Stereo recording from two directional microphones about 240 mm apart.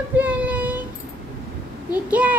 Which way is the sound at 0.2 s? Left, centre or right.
Centre.